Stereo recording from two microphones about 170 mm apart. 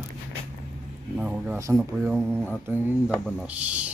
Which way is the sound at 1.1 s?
5° right (ahead or behind).